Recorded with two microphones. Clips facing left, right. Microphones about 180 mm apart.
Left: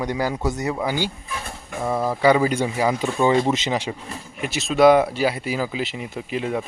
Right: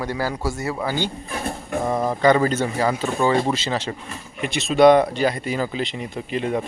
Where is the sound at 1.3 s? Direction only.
45° right (ahead or behind).